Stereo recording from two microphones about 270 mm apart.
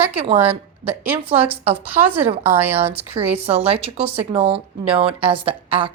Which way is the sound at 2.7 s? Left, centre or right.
Right.